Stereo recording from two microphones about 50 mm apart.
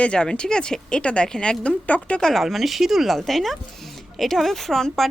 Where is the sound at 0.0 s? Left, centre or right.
Centre.